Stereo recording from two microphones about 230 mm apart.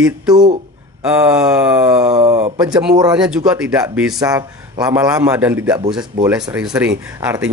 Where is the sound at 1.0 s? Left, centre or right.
Centre.